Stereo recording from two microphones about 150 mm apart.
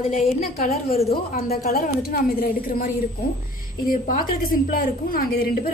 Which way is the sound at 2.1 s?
75° left (ahead or behind).